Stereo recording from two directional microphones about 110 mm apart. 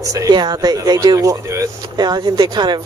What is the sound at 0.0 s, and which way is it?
Speech, 30° right (ahead or behind).